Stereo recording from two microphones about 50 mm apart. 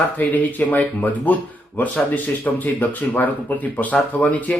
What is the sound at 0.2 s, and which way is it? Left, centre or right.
Speech, left.